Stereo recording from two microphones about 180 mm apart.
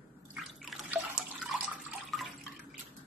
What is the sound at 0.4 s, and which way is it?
Water, centre (ahead or behind).